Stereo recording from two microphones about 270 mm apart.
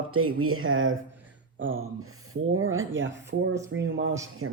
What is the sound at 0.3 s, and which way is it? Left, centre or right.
A man's voice, right.